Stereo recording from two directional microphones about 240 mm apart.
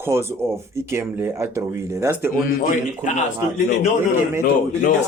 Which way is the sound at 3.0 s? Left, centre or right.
Left.